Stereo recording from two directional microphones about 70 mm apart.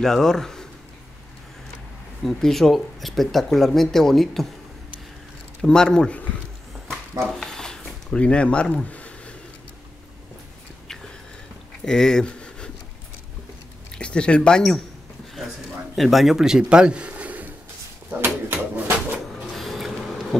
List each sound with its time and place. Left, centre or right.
0.0 s speech: centre
2.2 s speech: centre
5.6 s speech: centre
7.2 s a sound: centre
11.8 s a sound: centre
13.9 s speech: centre
16.0 s speech: centre; by 17.5 s right
18.1 s pigeon: right
19.1 s printer: centre